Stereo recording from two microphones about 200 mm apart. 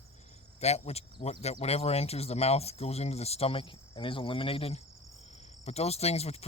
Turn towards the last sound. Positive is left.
turn(degrees=30)  # may be behind; listen again after turning